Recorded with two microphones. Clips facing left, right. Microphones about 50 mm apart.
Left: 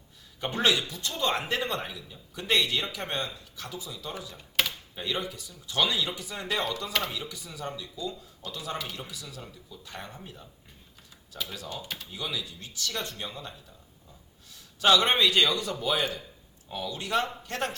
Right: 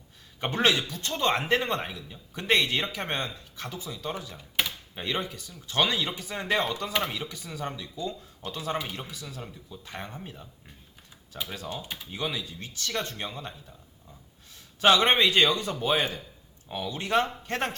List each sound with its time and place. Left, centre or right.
0.3 s a man's voice: right
6.9 s speech: centre
7.2 s a man's voice: right
11.5 s speech: right
14.8 s a man's voice: right